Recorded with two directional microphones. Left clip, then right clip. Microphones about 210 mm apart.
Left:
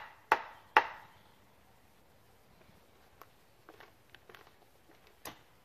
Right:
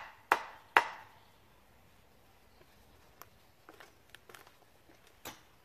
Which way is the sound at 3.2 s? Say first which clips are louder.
Right 1 dB; 5° right (ahead or behind).